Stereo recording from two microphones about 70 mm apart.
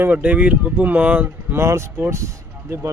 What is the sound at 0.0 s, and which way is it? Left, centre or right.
Speech, right.